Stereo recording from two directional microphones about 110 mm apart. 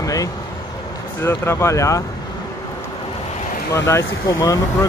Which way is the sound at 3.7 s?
25° left (ahead or behind).